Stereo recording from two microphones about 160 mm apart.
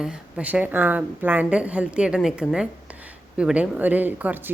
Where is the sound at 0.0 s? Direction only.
5° right (ahead or behind).